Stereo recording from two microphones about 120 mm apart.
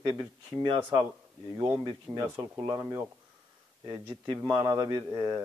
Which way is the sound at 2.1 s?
30° right (ahead or behind).